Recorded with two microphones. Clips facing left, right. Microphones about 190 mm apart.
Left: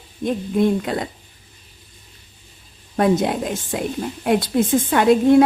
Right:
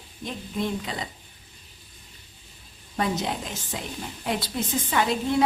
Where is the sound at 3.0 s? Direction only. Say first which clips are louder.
Left 9 dB; 55° left (ahead or behind).